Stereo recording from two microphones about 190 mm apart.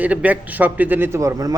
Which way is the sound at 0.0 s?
10° right (ahead or behind).